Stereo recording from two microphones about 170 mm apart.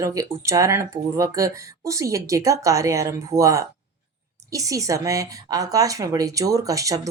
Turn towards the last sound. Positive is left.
turn(degrees=-20)  # may be behind; listen again after turning